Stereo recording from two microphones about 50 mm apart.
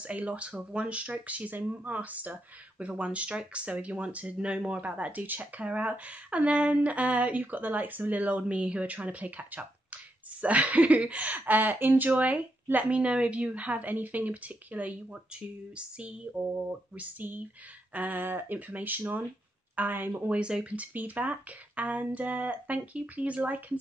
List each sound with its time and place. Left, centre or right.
0.0 s speech: right
18.2 s speech: right
18.7 s speech: right
20.2 s speech: right